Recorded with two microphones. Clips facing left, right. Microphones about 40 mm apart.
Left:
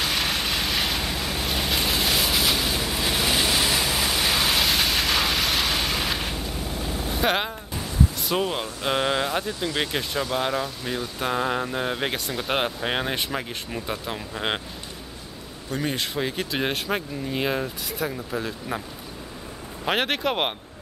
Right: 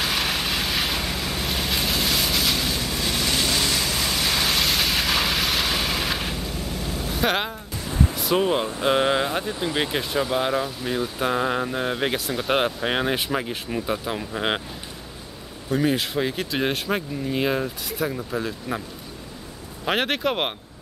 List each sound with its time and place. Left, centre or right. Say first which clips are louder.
0.0 s vehicle: right 1 dB; centre
7.2 s speech: even; centre
9.5 s speech: right 2 dB; centre
9.8 s speech: right 3 dB; centre
15.7 s speech: right 5 dB; centre
19.8 s speech: right 1 dB; centre